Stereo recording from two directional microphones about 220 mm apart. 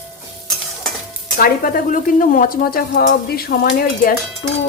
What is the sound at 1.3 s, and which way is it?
Speech, 40° left (ahead or behind).